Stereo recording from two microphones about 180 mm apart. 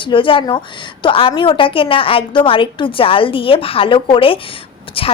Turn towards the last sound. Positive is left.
turn(degrees=30)  # may be behind; listen again after turning